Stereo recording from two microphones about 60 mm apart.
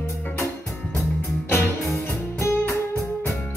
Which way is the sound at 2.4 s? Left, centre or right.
Left.